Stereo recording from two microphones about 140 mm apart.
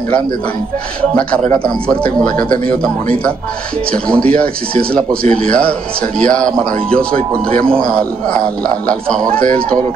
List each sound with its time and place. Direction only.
1.5 s a man's voice: 10° left (ahead or behind)
3.9 s a man's voice: 5° left (ahead or behind)
4.3 s speech: 90° right
5.5 s a man's voice: 10° left (ahead or behind)
9.3 s speech: 90° right